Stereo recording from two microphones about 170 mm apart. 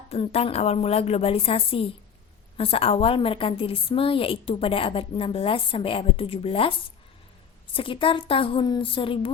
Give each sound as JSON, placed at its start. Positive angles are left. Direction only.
{"t": 0.1, "sound": "a woman's voice", "side_deg": 40}